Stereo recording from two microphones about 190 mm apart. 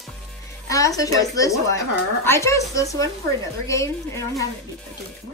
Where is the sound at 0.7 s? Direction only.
20° left (ahead or behind).